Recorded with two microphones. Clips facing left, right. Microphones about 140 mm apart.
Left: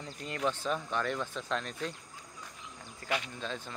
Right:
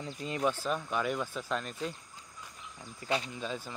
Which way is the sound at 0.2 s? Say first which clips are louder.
Right 2 dB; 15° right (ahead or behind).